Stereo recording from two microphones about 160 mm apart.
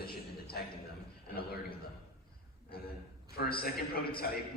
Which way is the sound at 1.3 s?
70° left (ahead or behind).